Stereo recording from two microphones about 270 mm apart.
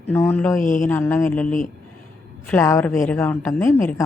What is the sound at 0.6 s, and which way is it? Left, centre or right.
Speech, left.